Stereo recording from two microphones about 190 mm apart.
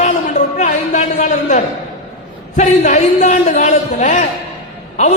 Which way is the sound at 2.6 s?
40° left (ahead or behind).